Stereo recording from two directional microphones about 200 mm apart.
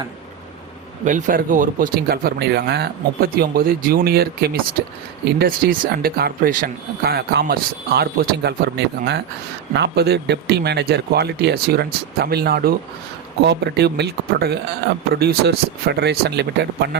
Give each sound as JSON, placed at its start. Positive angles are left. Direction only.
{"t": 1.0, "sound": "speech", "side_deg": -40}